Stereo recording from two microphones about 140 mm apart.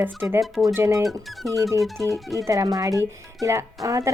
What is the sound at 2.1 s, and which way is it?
Speech, 25° right (ahead or behind).